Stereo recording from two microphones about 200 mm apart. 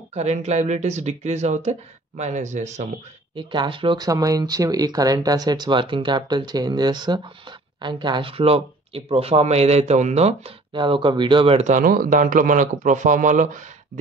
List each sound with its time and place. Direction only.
0.1 s speech: 35° right (ahead or behind)
3.3 s speech: 25° right (ahead or behind)